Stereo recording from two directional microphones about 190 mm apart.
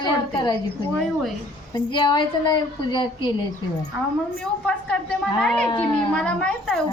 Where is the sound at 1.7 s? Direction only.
25° left (ahead or behind).